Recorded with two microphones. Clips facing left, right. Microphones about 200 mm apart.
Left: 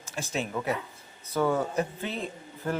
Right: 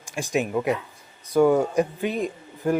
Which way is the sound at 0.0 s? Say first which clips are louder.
Right 7 dB; 15° right (ahead or behind).